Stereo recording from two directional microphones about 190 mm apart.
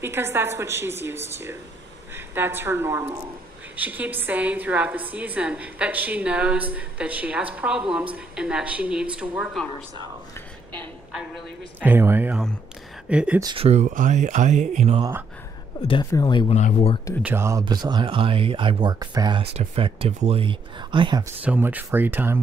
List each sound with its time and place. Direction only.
0.0 s a woman's voice: 15° right (ahead or behind)
11.1 s a woman's voice: 5° right (ahead or behind)
13.4 s speech: 25° right (ahead or behind)
15.9 s speech: 20° left (ahead or behind)
16.5 s speech: 35° left (ahead or behind)
17.2 s speech: 10° right (ahead or behind)
19.5 s speech: 35° right (ahead or behind)
21.4 s a woman's voice: 10° right (ahead or behind)